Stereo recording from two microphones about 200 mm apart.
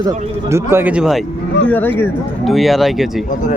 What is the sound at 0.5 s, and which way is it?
Speech, 10° right (ahead or behind).